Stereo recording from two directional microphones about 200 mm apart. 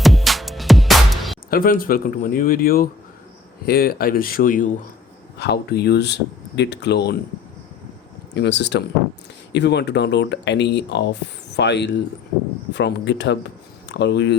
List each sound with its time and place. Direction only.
0.0 s music: centre (ahead or behind)
1.5 s speech: 45° left (ahead or behind)
5.4 s speech: 55° left (ahead or behind)
8.4 s speech: 60° left (ahead or behind)